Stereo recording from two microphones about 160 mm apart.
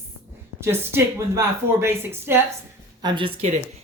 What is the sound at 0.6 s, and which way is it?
A man's voice, 15° right (ahead or behind).